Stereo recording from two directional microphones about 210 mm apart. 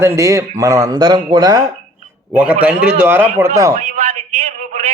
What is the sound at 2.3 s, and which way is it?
Speech, 5° right (ahead or behind).